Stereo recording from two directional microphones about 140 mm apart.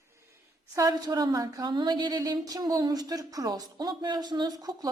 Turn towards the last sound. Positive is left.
turn(degrees=-30)  # may be behind; listen again after turning